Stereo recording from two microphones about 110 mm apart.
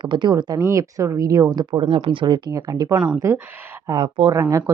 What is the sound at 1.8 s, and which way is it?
Speech, 55° right (ahead or behind).